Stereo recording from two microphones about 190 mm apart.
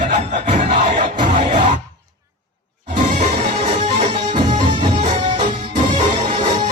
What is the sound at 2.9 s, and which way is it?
Music, 40° right (ahead or behind).